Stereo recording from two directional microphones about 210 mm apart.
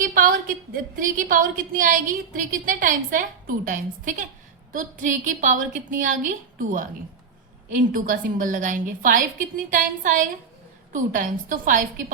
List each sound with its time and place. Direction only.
0.0 s a woman's voice: 40° right (ahead or behind)